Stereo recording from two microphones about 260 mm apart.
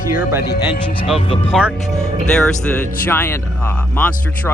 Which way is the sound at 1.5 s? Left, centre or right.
Centre.